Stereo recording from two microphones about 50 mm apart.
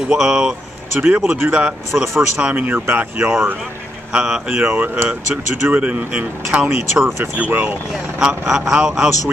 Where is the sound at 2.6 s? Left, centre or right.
Right.